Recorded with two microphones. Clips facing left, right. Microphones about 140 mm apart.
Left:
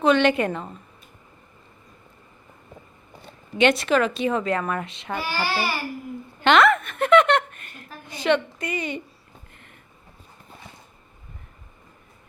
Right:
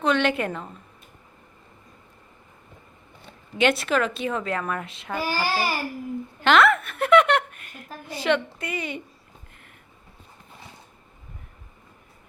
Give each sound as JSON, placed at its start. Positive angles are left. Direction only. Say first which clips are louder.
{"t": 0.0, "sound": "a woman's voice", "louder": "left 4 dB", "side_deg": 0}
{"t": 3.6, "sound": "a woman's voice", "louder": "left 3 dB", "side_deg": 0}
{"t": 5.2, "sound": "a child's voice", "louder": "right 1 dB", "side_deg": -45}
{"t": 6.4, "sound": "a woman's voice", "louder": "left 1 dB", "side_deg": 0}